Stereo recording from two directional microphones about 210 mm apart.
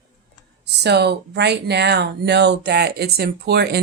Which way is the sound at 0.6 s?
50° right (ahead or behind).